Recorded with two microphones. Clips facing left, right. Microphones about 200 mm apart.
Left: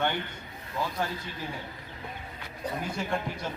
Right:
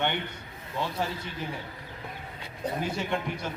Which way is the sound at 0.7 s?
Centre (ahead or behind).